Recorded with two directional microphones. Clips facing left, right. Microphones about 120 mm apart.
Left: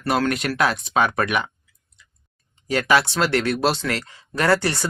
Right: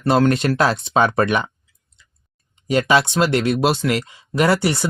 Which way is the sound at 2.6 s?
20° right (ahead or behind).